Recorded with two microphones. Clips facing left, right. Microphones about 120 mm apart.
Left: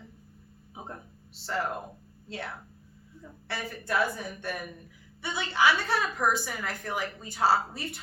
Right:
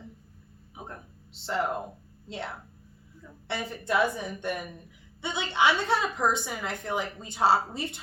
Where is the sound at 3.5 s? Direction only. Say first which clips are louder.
Right 3 dB; 20° right (ahead or behind).